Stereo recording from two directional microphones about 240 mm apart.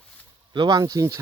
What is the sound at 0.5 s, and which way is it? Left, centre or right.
Speech, centre.